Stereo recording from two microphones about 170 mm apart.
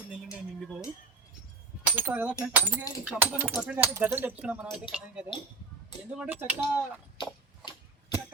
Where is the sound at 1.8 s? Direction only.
10° right (ahead or behind).